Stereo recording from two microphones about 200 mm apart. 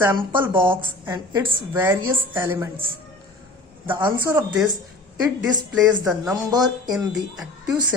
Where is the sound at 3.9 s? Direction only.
25° right (ahead or behind).